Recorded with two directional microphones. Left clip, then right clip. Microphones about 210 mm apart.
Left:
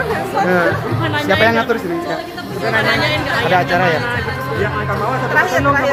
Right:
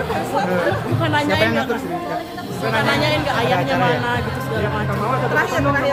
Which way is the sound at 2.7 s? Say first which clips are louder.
Left 3 dB; 40° right (ahead or behind).